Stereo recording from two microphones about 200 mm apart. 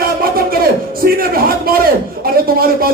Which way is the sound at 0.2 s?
45° right (ahead or behind).